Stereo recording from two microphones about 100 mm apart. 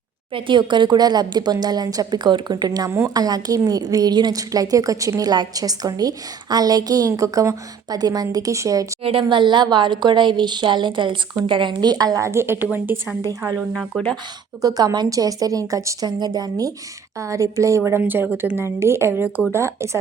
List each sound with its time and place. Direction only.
0.3 s a woman's voice: 55° right (ahead or behind); by 8.9 s 35° right (ahead or behind)
9.3 s a woman's voice: 50° right (ahead or behind); by 13.1 s 15° right (ahead or behind)
13.2 s a woman's voice: 35° right (ahead or behind)
14.6 s a woman's voice: 35° right (ahead or behind)
18.0 s speech: 15° right (ahead or behind)